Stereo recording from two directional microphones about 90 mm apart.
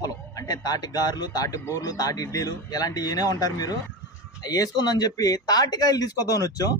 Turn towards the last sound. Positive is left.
turn(degrees=40)  # may be behind; listen again after turning